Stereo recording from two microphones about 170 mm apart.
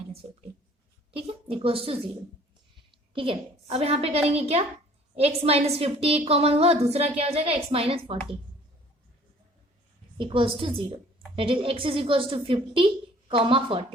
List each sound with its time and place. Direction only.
0.2 s a woman's voice: 40° right (ahead or behind)
3.1 s a woman's voice: 30° right (ahead or behind)
10.2 s a woman's voice: 30° right (ahead or behind)